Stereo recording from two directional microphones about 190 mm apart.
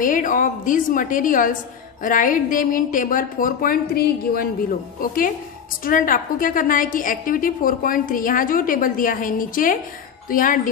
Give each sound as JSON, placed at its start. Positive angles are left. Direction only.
{"t": 0.0, "sound": "a woman's voice", "side_deg": 45}